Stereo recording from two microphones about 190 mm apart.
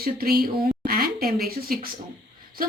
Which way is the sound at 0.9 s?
55° right (ahead or behind).